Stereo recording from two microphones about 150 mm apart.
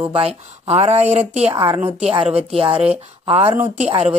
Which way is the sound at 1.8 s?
15° right (ahead or behind).